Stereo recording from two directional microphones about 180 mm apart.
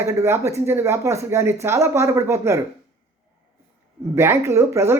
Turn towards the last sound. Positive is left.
turn(degrees=-15)  # may be behind; listen again after turning